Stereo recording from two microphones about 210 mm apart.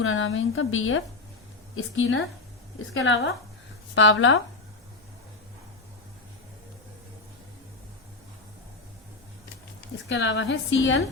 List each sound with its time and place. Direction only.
0.0 s a woman's voice: 70° left (ahead or behind)
10.1 s a woman's voice: 60° left (ahead or behind)